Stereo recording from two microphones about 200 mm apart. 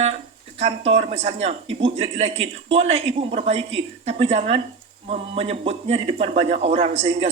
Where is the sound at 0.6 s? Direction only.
30° right (ahead or behind).